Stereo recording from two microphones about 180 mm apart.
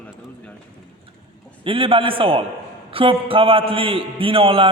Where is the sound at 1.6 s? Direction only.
30° right (ahead or behind).